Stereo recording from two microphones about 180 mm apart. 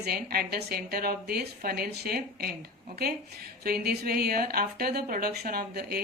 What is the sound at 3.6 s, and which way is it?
Speech, 60° right (ahead or behind).